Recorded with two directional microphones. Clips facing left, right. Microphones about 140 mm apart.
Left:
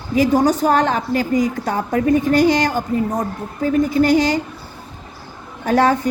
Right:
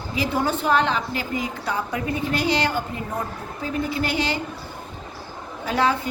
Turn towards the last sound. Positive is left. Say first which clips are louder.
# left 7 dB
turn(degrees=45)  # may be behind; listen again after turning